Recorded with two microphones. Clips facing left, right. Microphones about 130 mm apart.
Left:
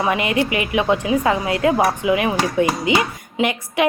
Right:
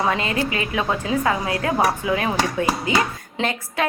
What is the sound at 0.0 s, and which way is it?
A woman's voice, 15° left (ahead or behind).